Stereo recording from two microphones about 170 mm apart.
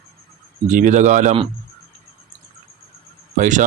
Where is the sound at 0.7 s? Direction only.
45° right (ahead or behind).